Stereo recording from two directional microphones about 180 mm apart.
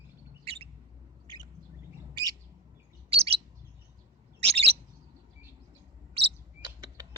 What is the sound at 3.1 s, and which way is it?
Bird, 30° right (ahead or behind).